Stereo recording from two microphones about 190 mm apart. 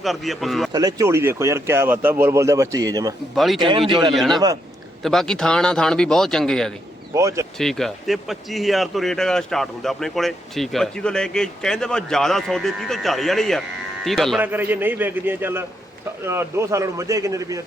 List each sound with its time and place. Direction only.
0.0 s speech: centre (ahead or behind)
0.7 s speech: 20° right (ahead or behind)
3.3 s speech: centre (ahead or behind)
3.6 s a man's voice: 25° right (ahead or behind)
4.1 s speech: centre (ahead or behind)
7.1 s speech: 15° right (ahead or behind)
7.6 s speech: centre (ahead or behind)
14.4 s speech: 10° right (ahead or behind)